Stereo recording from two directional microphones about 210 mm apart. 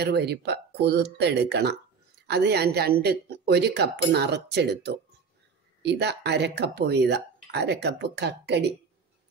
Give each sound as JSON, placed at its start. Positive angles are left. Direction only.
{"t": 0.0, "sound": "speech", "side_deg": -50}